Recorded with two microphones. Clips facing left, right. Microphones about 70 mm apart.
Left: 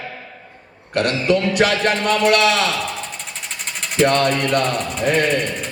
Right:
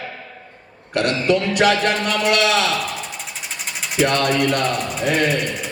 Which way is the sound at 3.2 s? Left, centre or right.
Centre.